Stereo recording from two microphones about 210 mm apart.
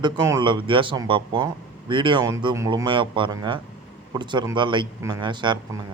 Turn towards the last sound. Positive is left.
turn(degrees=-20)  # may be behind; listen again after turning